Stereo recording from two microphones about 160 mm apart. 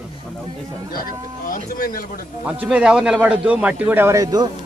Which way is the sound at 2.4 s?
5° right (ahead or behind).